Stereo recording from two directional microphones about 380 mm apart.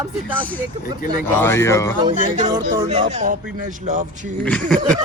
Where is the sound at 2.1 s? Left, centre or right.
Centre.